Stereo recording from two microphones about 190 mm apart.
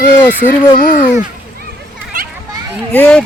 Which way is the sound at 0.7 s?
45° left (ahead or behind).